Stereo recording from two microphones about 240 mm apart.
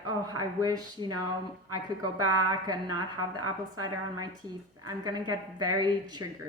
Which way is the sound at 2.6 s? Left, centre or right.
Centre.